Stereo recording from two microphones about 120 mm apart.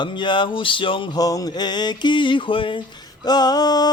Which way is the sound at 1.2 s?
30° left (ahead or behind).